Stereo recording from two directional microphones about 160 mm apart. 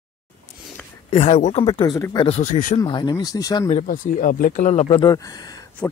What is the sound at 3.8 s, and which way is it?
Speech, 55° left (ahead or behind).